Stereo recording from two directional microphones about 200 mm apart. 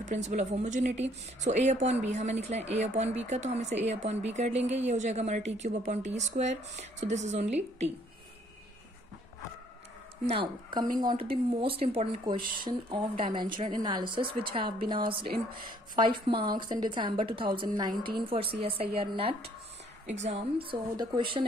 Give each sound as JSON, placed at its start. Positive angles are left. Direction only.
{"t": 0.0, "sound": "speech", "side_deg": -35}
{"t": 10.2, "sound": "a woman's voice", "side_deg": -25}